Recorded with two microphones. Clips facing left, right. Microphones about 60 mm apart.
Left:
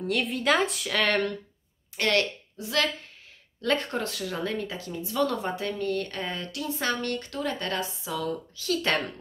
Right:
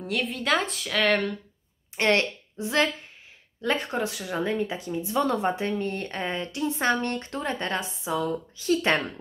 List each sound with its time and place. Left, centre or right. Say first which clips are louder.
0.0 s speech: left 2 dB; centre
2.0 s a woman's voice: right 2 dB; right
3.6 s speech: right 1 dB; centre